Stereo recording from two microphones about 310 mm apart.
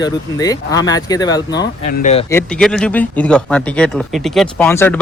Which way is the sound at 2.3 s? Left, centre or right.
Centre.